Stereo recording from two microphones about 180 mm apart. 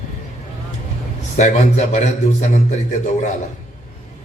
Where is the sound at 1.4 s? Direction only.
40° left (ahead or behind).